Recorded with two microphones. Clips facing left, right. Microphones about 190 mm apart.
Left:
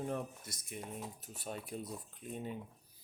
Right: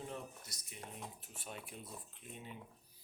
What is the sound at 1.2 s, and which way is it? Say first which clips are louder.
Speech: left 6 dB; 40° left (ahead or behind).